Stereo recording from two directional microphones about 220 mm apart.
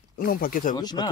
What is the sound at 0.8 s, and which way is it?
Speech, 20° left (ahead or behind).